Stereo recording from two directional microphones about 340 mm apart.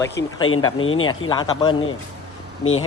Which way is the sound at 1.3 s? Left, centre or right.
Centre.